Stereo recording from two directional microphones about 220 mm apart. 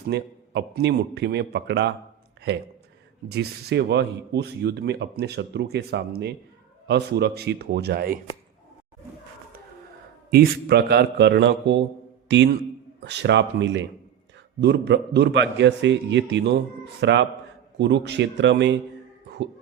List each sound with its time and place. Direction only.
0.1 s speech: 50° right (ahead or behind)
3.2 s speech: 50° right (ahead or behind)
10.2 s speech: 45° right (ahead or behind)